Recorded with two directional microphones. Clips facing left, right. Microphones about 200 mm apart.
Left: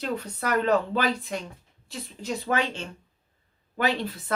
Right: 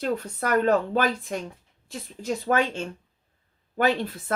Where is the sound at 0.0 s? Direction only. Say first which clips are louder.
Right 3 dB; 50° right (ahead or behind).